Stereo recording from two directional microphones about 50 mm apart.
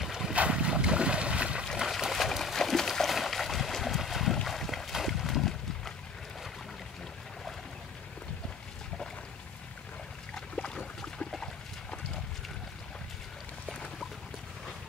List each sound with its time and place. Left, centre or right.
0.0 s boat: centre
0.3 s boat: right
1.8 s a sound: centre
4.5 s boat: centre
10.3 s boat: centre